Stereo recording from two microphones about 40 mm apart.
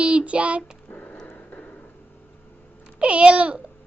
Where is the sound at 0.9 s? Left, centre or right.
Left.